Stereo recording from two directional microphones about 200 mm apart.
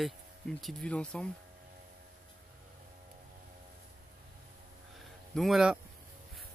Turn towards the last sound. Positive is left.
turn(degrees=-5)  # may be behind; listen again after turning